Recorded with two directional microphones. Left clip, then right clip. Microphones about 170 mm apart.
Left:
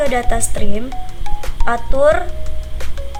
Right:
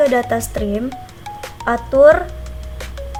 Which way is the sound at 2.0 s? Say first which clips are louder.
Right 4 dB; 35° right (ahead or behind).